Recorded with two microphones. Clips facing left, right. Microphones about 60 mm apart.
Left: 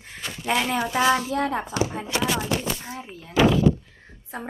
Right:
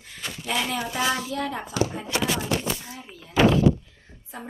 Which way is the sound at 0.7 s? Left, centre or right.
Left.